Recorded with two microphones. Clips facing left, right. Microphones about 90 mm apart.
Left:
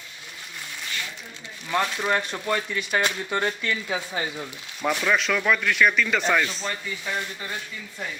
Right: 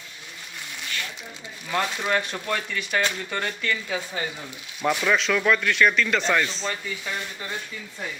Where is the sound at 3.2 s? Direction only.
20° left (ahead or behind).